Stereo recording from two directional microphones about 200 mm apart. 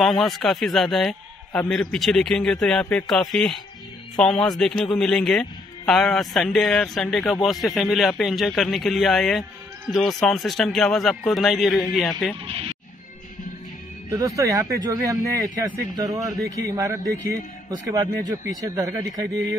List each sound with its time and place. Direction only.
0.0 s a man's voice: centre (ahead or behind)
12.4 s speech: 25° right (ahead or behind)
14.1 s a man's voice: 15° right (ahead or behind)